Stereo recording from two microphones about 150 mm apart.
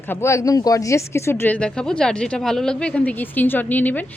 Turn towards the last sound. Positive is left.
turn(degrees=10)  # may be behind; listen again after turning